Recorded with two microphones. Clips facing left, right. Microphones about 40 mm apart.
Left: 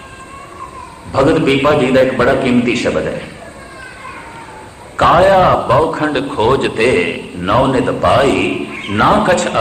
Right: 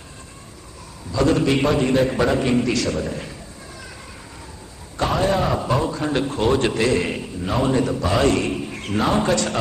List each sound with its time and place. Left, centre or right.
1.1 s a man's voice: left
4.9 s a man's voice: left